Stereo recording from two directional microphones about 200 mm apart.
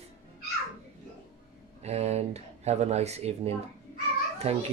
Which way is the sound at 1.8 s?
30° right (ahead or behind).